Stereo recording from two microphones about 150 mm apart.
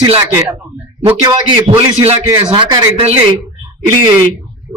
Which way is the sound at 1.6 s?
40° right (ahead or behind).